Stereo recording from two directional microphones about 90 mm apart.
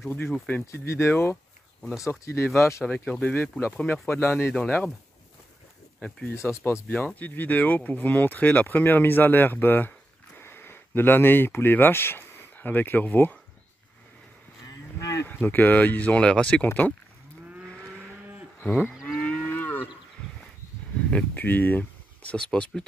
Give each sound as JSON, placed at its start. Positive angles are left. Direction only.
{"t": 0.1, "sound": "speech", "side_deg": 20}
{"t": 0.7, "sound": "speech", "side_deg": 30}
{"t": 1.8, "sound": "speech", "side_deg": 5}
{"t": 2.0, "sound": "speech", "side_deg": 30}
{"t": 2.8, "sound": "speech", "side_deg": 15}
{"t": 4.6, "sound": "speech", "side_deg": 15}
{"t": 5.9, "sound": "speech", "side_deg": 10}
{"t": 6.2, "sound": "speech", "side_deg": 30}
{"t": 7.2, "sound": "speech", "side_deg": 20}
{"t": 15.2, "sound": "speech", "side_deg": 20}
{"t": 17.6, "sound": "vehicle", "side_deg": 10}
{"t": 18.6, "sound": "moo", "side_deg": 20}
{"t": 21.4, "sound": "speech", "side_deg": 20}